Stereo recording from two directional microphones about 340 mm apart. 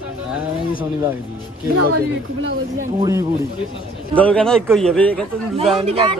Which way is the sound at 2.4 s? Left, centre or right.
Right.